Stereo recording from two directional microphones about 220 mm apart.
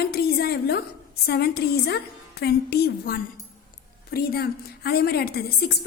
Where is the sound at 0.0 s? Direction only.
45° left (ahead or behind).